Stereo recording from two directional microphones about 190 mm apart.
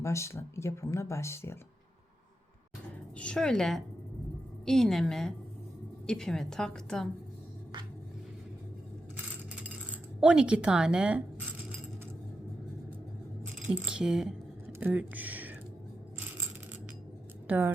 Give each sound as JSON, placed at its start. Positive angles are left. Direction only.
{"t": 0.0, "sound": "speech", "side_deg": 15}
{"t": 3.2, "sound": "a woman's voice", "side_deg": 5}
{"t": 10.2, "sound": "a woman's voice", "side_deg": -5}
{"t": 13.4, "sound": "speech", "side_deg": -5}